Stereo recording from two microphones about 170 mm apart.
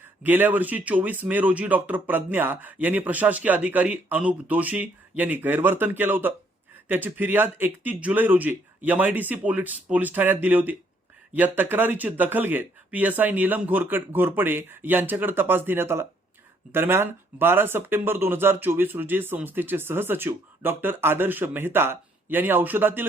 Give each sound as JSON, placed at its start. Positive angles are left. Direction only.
{"t": 0.2, "sound": "speech", "side_deg": -10}